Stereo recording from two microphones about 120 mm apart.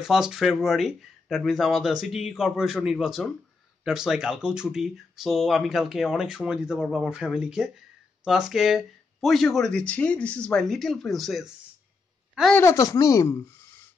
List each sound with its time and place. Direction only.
0.0 s speech: 5° right (ahead or behind)
12.5 s speech: 25° left (ahead or behind)